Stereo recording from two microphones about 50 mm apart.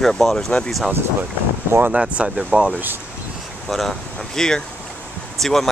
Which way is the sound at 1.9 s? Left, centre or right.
Right.